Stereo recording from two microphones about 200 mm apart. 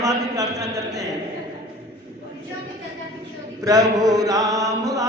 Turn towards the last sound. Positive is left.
turn(degrees=-15)  # may be behind; listen again after turning